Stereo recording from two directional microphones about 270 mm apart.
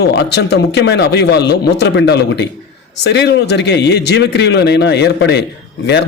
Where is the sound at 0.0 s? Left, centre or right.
Left.